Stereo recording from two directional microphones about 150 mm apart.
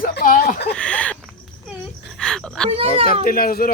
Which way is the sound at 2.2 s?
5° left (ahead or behind).